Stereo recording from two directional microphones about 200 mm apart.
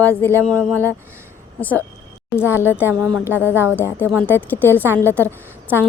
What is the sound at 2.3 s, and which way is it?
A woman's voice, 10° left (ahead or behind).